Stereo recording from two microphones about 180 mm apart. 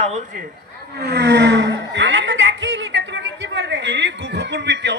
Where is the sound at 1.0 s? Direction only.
70° right (ahead or behind).